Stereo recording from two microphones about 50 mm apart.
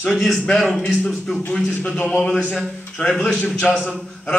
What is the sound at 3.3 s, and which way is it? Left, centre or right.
Speech, left.